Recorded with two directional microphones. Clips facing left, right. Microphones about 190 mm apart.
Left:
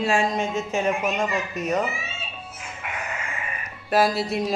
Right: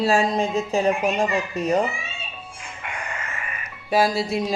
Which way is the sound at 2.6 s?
5° left (ahead or behind).